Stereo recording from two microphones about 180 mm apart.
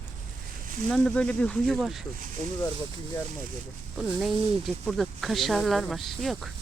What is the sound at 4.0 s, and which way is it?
Speech, centre (ahead or behind).